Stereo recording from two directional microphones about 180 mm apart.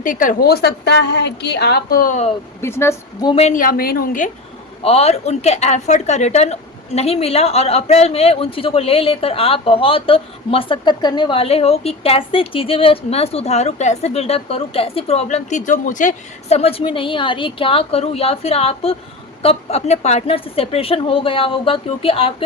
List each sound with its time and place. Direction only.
0.0 s a woman's voice: 45° left (ahead or behind)
2.6 s a woman's voice: 15° left (ahead or behind)
3.3 s a woman's voice: 40° left (ahead or behind)
4.8 s a woman's voice: 35° left (ahead or behind)